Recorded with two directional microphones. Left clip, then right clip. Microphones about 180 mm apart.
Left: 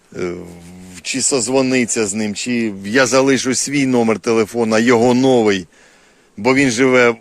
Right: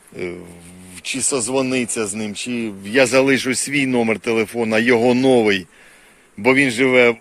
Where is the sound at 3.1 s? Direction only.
20° left (ahead or behind).